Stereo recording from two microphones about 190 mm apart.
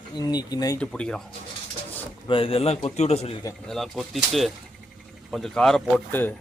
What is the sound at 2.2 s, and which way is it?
A man's voice, 30° left (ahead or behind).